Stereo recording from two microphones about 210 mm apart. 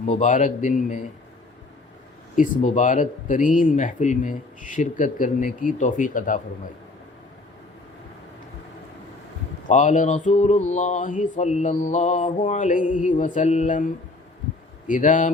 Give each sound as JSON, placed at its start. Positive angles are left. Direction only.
{"t": 0.0, "sound": "mantra", "side_deg": 35}
{"t": 2.3, "sound": "mantra", "side_deg": 35}
{"t": 9.6, "sound": "mantra", "side_deg": 35}